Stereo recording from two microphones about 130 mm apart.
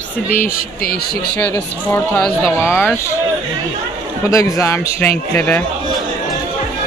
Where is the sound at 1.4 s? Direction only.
15° left (ahead or behind).